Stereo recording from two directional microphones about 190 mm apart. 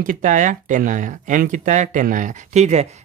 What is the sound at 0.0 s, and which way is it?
Speech, 45° right (ahead or behind).